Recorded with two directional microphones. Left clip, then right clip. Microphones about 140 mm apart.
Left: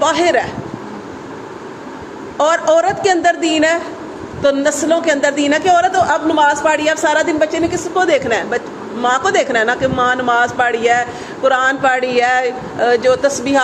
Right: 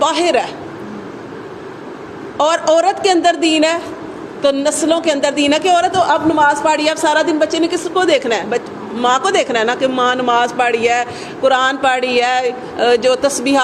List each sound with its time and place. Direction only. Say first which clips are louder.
0.0 s a woman's voice: left 1 dB; 40° right (ahead or behind)
2.4 s a woman's voice: even; 40° right (ahead or behind)